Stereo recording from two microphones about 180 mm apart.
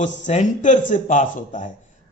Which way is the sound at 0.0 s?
40° left (ahead or behind).